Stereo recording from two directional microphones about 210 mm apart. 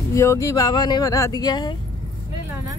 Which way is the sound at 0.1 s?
15° left (ahead or behind).